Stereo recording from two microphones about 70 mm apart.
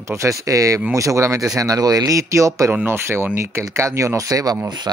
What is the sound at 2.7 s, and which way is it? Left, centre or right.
Speech, right.